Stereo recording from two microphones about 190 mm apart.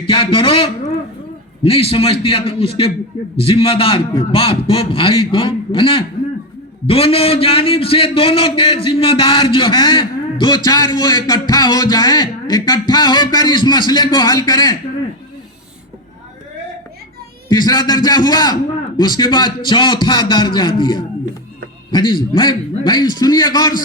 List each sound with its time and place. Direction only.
0.0 s a man's voice: 30° left (ahead or behind)
17.5 s a man's voice: 20° left (ahead or behind)